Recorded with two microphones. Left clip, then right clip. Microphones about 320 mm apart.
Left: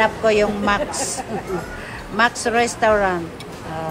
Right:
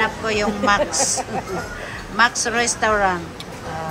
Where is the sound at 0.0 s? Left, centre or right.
Centre.